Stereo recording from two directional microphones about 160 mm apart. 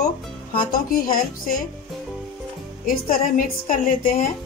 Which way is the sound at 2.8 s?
60° left (ahead or behind).